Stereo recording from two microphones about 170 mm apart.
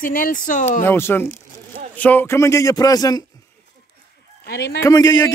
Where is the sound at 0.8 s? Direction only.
15° left (ahead or behind).